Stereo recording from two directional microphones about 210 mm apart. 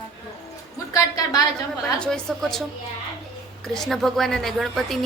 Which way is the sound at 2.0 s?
5° left (ahead or behind).